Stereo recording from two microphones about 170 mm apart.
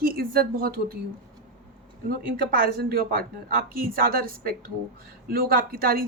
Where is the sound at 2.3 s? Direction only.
65° right (ahead or behind).